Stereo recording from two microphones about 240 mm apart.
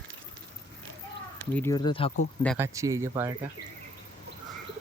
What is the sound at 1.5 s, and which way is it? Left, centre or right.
Speech, centre.